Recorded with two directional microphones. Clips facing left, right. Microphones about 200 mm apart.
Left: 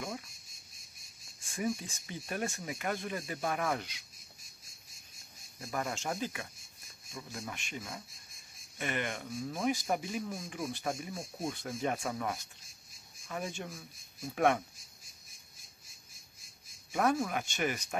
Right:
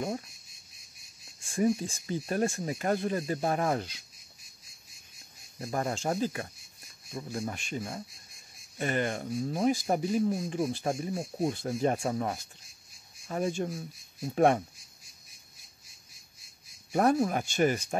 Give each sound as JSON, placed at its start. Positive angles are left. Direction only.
{"t": 1.4, "sound": "speech", "side_deg": -35}
{"t": 5.6, "sound": "speech", "side_deg": -35}
{"t": 16.9, "sound": "speech", "side_deg": -40}